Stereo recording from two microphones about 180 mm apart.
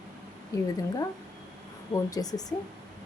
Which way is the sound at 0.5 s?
20° left (ahead or behind).